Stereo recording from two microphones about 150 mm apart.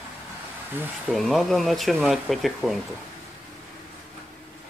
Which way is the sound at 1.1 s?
Centre (ahead or behind).